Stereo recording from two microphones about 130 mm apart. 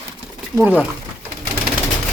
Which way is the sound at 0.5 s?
15° right (ahead or behind).